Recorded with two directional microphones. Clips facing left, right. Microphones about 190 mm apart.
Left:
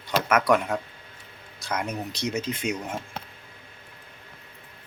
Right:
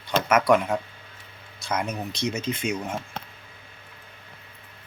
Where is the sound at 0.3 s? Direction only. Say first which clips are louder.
Right 2 dB; 5° right (ahead or behind).